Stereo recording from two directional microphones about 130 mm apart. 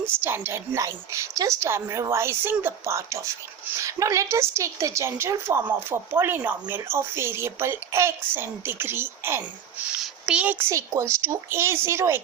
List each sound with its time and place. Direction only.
0.0 s a woman's voice: 15° right (ahead or behind)